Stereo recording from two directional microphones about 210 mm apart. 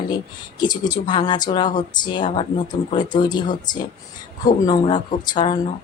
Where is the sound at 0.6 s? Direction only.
20° left (ahead or behind).